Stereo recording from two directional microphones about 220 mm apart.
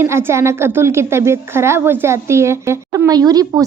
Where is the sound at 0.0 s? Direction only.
10° right (ahead or behind).